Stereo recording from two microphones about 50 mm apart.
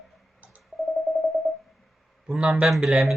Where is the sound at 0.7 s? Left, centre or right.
Centre.